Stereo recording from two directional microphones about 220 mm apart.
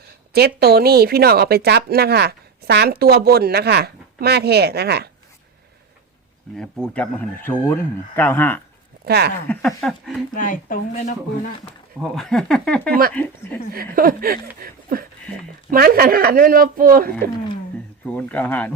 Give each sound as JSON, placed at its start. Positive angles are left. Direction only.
{"t": 0.3, "sound": "speech", "side_deg": -45}
{"t": 6.6, "sound": "speech", "side_deg": 5}
{"t": 9.0, "sound": "speech", "side_deg": -45}
{"t": 9.5, "sound": "speech", "side_deg": 5}
{"t": 10.3, "sound": "speech", "side_deg": 40}
{"t": 11.9, "sound": "speech", "side_deg": 0}
{"t": 13.7, "sound": "speech", "side_deg": -40}
{"t": 18.0, "sound": "speech", "side_deg": 5}